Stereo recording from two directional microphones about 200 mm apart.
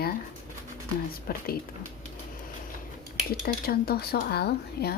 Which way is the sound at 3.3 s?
50° left (ahead or behind).